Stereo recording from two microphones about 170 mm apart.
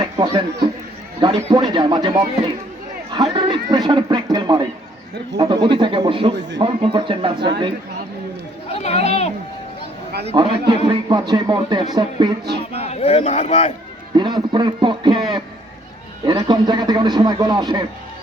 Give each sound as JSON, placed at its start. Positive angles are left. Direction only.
{"t": 0.0, "sound": "a sound", "side_deg": -25}
{"t": 1.5, "sound": "a man's voice", "side_deg": -25}
{"t": 8.7, "sound": "speech", "side_deg": 40}
{"t": 10.2, "sound": "a man's voice", "side_deg": -30}
{"t": 12.5, "sound": "speech", "side_deg": -70}
{"t": 12.8, "sound": "a man's voice", "side_deg": 35}
{"t": 14.2, "sound": "a man's voice", "side_deg": -25}